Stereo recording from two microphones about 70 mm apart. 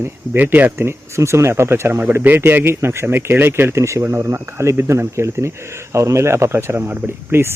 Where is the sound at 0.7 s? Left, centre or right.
Right.